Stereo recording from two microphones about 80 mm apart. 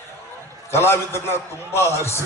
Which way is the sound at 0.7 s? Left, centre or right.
Left.